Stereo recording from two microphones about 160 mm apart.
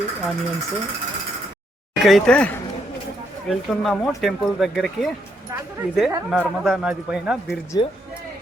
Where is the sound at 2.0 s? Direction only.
Centre (ahead or behind).